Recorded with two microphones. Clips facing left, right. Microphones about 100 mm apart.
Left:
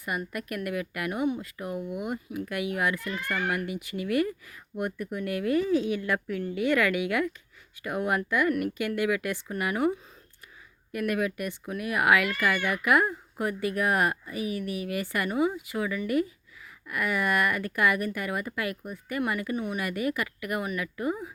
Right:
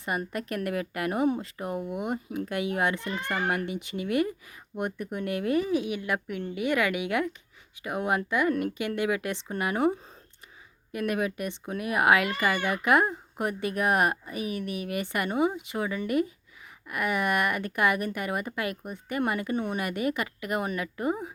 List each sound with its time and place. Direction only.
0.3 s speech: 25° right (ahead or behind)